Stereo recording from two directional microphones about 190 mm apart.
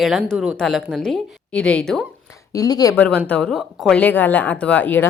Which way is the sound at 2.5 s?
20° left (ahead or behind).